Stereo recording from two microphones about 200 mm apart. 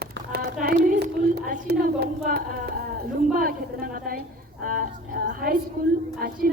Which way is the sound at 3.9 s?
45° right (ahead or behind).